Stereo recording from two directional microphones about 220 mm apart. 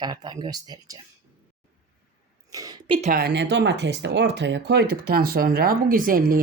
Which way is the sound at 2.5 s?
15° right (ahead or behind).